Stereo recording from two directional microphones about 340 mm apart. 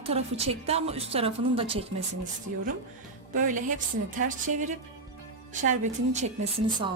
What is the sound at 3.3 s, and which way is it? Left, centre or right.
A woman's voice, right.